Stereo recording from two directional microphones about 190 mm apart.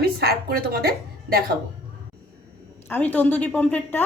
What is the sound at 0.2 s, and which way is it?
A woman's voice, 55° right (ahead or behind).